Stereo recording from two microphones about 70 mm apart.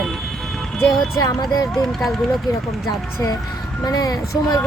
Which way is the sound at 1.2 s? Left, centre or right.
Left.